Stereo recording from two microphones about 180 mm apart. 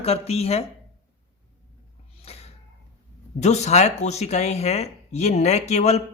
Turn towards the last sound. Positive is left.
turn(degrees=35)  # may be behind; listen again after turning